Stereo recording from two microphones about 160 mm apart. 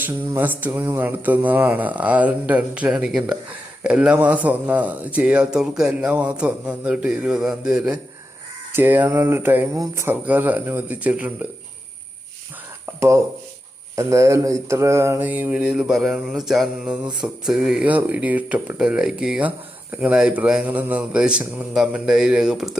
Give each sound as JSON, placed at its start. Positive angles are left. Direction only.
{"t": 0.0, "sound": "speech", "side_deg": -10}
{"t": 12.8, "sound": "speech", "side_deg": -15}